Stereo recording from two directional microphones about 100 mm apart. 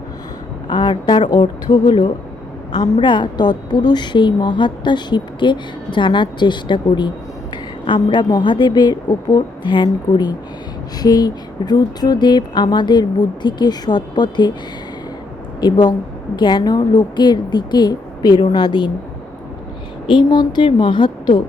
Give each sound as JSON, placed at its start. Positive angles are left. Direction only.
{"t": 0.7, "sound": "a woman's voice", "side_deg": 55}
{"t": 15.6, "sound": "a woman's voice", "side_deg": 45}
{"t": 20.1, "sound": "a woman's voice", "side_deg": 50}